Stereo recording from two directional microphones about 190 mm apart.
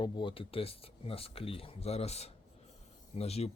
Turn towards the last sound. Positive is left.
turn(degrees=35)  # may be behind; listen again after turning